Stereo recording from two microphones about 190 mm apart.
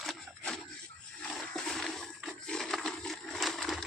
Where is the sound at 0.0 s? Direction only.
Centre (ahead or behind).